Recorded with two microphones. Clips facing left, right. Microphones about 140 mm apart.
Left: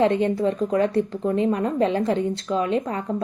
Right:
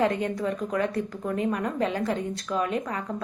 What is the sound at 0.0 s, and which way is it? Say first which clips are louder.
A woman's voice: left 6 dB; 25° left (ahead or behind).